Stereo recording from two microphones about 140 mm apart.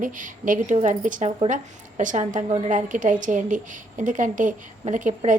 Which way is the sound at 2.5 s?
55° right (ahead or behind).